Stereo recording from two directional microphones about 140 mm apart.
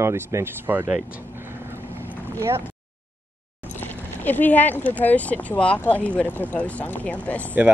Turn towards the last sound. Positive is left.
turn(degrees=10)  # may be behind; listen again after turning